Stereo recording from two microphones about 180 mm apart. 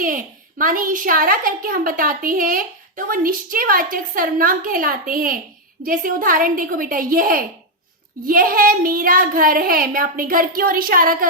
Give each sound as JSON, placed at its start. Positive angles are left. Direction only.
{"t": 0.6, "sound": "a woman's voice", "side_deg": -50}